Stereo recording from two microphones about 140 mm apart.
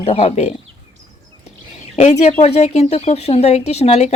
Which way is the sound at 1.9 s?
55° left (ahead or behind).